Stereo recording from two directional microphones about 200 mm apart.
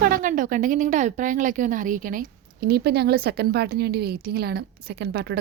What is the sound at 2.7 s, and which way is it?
A woman's voice, 55° right (ahead or behind).